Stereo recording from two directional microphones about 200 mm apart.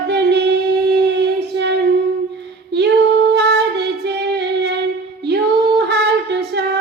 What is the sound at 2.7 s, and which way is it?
Female singing, 55° right (ahead or behind).